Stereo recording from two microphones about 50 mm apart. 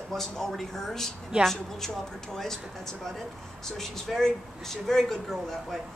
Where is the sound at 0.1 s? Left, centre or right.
Centre.